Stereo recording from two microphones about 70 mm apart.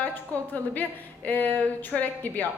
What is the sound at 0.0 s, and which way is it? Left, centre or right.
A woman's voice, left.